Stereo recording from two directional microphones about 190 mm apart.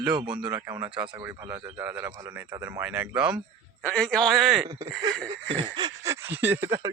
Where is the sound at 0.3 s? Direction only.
5° right (ahead or behind).